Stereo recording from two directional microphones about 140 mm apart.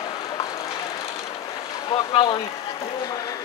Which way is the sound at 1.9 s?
35° left (ahead or behind).